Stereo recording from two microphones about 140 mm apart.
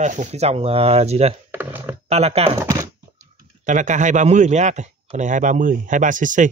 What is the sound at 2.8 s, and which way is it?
Speech, 65° right (ahead or behind).